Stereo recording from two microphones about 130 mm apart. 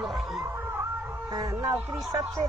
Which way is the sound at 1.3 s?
30° right (ahead or behind).